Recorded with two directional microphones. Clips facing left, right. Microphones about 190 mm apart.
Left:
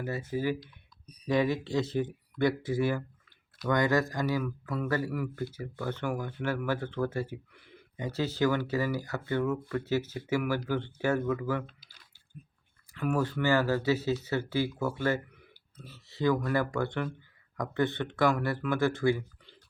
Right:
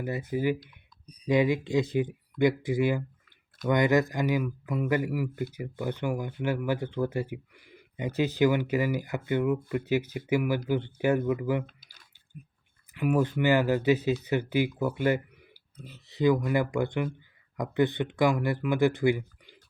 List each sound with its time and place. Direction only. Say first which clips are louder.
0.0 s speech: right 3 dB; 15° right (ahead or behind)
12.9 s speech: right 4 dB; 15° right (ahead or behind)